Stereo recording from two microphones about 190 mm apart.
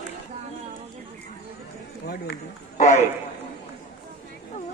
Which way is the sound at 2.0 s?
60° left (ahead or behind).